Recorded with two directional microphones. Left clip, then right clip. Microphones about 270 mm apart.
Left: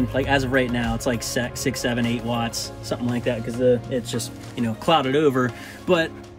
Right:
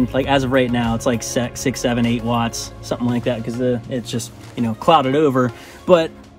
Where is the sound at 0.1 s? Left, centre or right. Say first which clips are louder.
Right 3 dB; centre.